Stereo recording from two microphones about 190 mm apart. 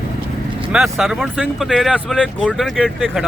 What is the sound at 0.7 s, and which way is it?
Speech, centre (ahead or behind).